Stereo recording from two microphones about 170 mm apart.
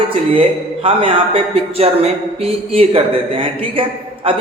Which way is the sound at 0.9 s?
30° right (ahead or behind).